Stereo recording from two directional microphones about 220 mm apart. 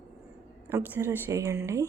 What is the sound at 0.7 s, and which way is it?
Speech, 10° right (ahead or behind).